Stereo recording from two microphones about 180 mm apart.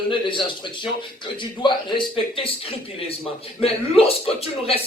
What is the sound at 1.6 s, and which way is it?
Speech, 25° left (ahead or behind).